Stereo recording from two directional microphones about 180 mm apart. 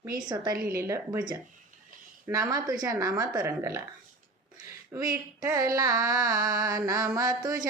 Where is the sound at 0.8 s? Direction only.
15° right (ahead or behind).